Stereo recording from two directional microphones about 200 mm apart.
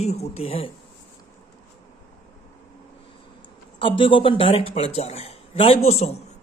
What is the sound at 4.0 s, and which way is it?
Speech, 25° left (ahead or behind).